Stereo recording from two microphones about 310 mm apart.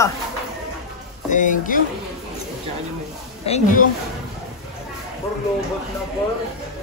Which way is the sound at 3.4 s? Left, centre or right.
Left.